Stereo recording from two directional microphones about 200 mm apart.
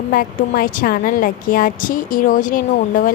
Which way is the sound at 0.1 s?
45° left (ahead or behind).